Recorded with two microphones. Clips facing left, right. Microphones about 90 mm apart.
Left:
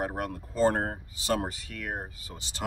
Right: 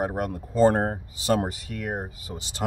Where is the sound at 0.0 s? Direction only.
20° right (ahead or behind).